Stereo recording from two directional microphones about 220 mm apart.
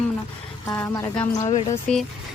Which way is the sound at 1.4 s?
25° left (ahead or behind).